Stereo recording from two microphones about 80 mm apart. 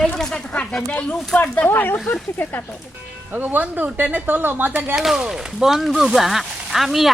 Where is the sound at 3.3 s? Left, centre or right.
Right.